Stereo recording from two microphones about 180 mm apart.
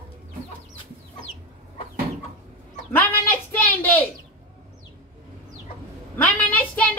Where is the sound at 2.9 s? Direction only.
10° left (ahead or behind).